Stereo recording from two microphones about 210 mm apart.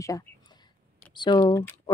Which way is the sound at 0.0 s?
15° left (ahead or behind).